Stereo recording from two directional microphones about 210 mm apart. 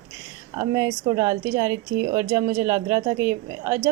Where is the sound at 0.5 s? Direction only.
15° right (ahead or behind).